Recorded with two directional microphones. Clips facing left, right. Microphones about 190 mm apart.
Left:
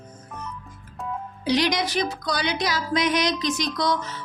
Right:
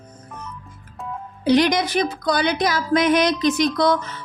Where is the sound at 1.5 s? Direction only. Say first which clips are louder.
Right 6 dB; 55° right (ahead or behind).